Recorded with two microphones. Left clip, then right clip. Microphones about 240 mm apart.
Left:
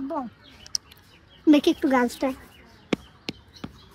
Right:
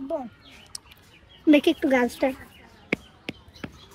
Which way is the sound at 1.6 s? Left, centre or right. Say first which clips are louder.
Even; left.